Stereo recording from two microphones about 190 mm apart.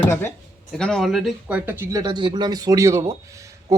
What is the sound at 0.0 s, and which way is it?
Speech, 10° left (ahead or behind).